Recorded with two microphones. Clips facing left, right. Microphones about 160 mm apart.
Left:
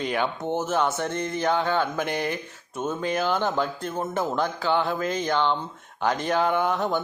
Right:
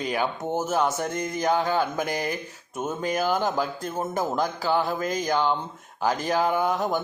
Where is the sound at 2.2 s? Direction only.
40° right (ahead or behind).